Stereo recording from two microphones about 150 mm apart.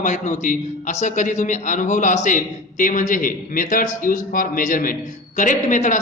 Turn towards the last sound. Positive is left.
turn(degrees=55)  # may be behind; listen again after turning